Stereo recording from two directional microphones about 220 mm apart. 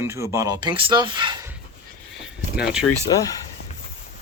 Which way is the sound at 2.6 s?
5° right (ahead or behind).